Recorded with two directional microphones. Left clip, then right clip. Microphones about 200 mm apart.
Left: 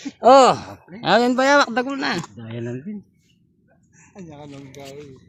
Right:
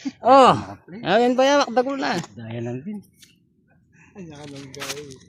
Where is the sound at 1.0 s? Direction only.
35° left (ahead or behind); by 2.2 s 15° left (ahead or behind).